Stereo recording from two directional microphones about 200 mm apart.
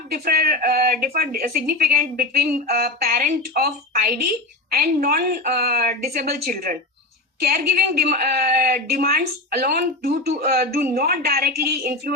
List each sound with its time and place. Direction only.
0.1 s speech: 50° right (ahead or behind)